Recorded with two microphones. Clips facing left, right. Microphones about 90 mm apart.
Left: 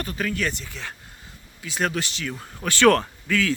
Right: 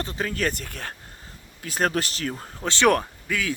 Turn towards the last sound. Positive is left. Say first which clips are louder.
# left 4 dB
turn(degrees=-15)  # may be behind; listen again after turning